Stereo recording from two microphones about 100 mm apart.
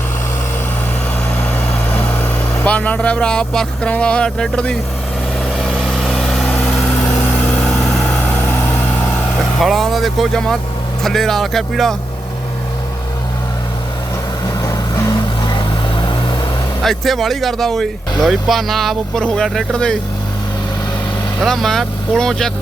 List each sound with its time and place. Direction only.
1.9 s vehicle: 15° left (ahead or behind)
2.6 s speech: 15° left (ahead or behind)
5.5 s vehicle: centre (ahead or behind)
7.6 s vehicle: centre (ahead or behind)
9.6 s speech: centre (ahead or behind)
14.6 s vehicle: 30° left (ahead or behind)
15.5 s vehicle: 50° left (ahead or behind)
16.8 s speech: centre (ahead or behind)
21.4 s speech: 5° left (ahead or behind)